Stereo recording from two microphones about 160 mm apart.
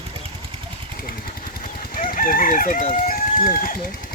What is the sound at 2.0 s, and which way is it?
Fowl, 60° left (ahead or behind).